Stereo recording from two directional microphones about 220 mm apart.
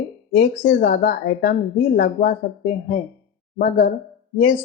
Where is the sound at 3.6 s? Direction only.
40° left (ahead or behind).